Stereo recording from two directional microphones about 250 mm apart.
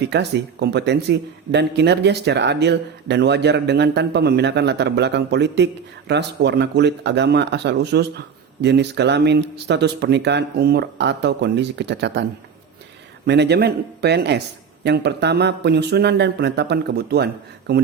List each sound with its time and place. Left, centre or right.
0.0 s a man's voice: right
13.2 s speech: right